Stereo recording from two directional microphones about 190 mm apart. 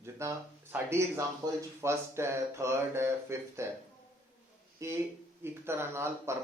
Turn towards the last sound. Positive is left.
turn(degrees=-15)  # may be behind; listen again after turning